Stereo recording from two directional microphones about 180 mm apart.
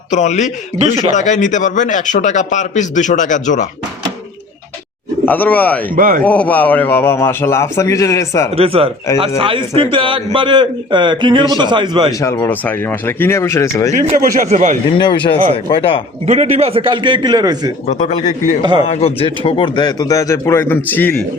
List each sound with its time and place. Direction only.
0.1 s a man's voice: 40° left (ahead or behind)
0.8 s a man's voice: 30° right (ahead or behind)
1.1 s a man's voice: 40° left (ahead or behind)
5.2 s a man's voice: 10° left (ahead or behind)
6.0 s a man's voice: 50° right (ahead or behind)
6.2 s a man's voice: 5° left (ahead or behind)
8.5 s a man's voice: 30° right (ahead or behind)
12.2 s a man's voice: 15° left (ahead or behind)
14.2 s a man's voice: 45° right (ahead or behind)
14.8 s a man's voice: 25° left (ahead or behind)
16.2 s a man's voice: 35° right (ahead or behind)
18.8 s a man's voice: 35° left (ahead or behind); by 21.2 s 10° left (ahead or behind)